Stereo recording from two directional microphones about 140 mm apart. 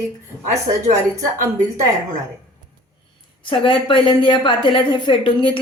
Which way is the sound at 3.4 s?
35° left (ahead or behind).